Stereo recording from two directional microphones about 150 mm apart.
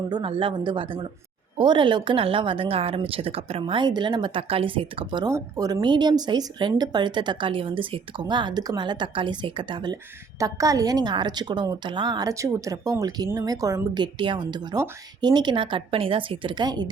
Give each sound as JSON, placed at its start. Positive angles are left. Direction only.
{"t": 0.1, "sound": "speech", "side_deg": -35}
{"t": 5.3, "sound": "a woman's voice", "side_deg": -20}